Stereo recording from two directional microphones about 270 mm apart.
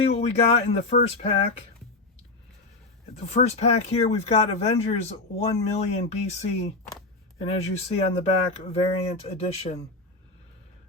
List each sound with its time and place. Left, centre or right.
0.0 s speech: left
3.2 s speech: left